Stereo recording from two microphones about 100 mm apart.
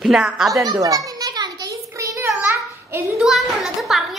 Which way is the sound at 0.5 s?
35° right (ahead or behind).